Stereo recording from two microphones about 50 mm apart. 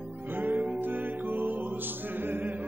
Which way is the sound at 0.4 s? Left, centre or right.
Right.